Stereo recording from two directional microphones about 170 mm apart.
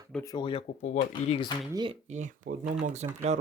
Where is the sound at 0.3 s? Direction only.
30° left (ahead or behind).